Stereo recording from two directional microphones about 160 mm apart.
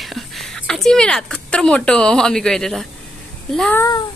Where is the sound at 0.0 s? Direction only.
Centre (ahead or behind).